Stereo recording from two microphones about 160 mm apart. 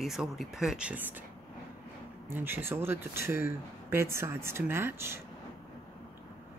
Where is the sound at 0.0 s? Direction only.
Centre (ahead or behind).